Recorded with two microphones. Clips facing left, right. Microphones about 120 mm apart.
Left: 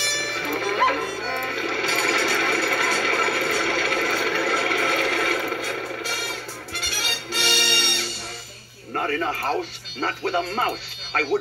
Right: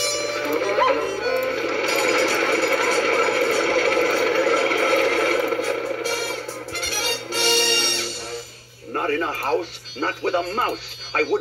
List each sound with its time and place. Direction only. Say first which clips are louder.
0.0 s music: right 5 dB; 35° right (ahead or behind)
10.0 s speech: right 2 dB; 40° right (ahead or behind)